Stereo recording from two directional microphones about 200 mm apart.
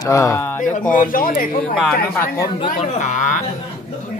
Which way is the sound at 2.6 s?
35° left (ahead or behind).